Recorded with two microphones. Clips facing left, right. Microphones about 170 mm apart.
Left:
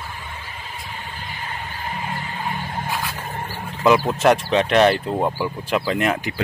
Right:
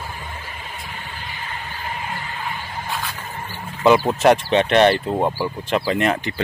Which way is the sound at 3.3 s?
40° left (ahead or behind).